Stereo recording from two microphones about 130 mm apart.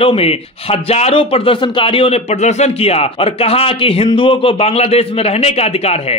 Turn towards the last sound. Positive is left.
turn(degrees=50)  # may be behind; listen again after turning